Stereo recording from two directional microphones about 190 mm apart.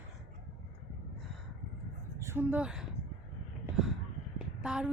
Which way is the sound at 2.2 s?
10° right (ahead or behind).